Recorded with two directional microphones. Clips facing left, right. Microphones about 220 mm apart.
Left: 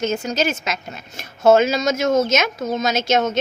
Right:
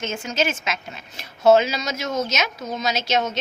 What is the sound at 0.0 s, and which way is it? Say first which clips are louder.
Speech: left 4 dB; 40° left (ahead or behind).